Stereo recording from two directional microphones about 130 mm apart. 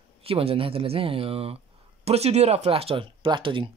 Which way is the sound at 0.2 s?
50° right (ahead or behind).